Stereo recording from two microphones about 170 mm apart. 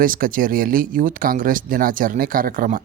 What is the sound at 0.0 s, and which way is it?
Speech, 55° right (ahead or behind).